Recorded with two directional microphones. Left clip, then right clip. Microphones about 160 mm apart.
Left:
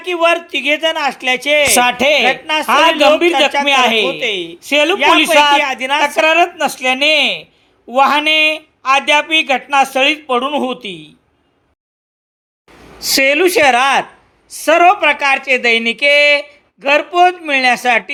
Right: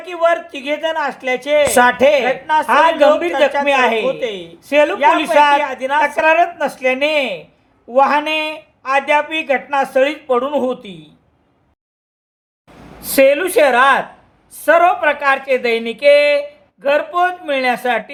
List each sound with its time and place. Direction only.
0.0 s speech: 30° left (ahead or behind)
13.0 s speech: 30° left (ahead or behind)